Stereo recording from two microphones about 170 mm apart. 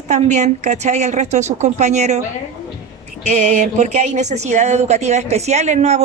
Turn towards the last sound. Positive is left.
turn(degrees=-40)  # may be behind; listen again after turning